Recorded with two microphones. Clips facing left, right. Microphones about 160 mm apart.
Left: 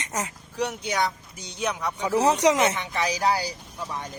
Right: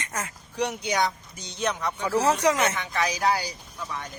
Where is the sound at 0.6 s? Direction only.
Centre (ahead or behind); by 2.9 s 20° left (ahead or behind).